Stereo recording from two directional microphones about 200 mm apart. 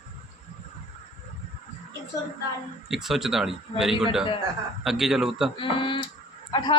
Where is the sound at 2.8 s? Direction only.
Centre (ahead or behind).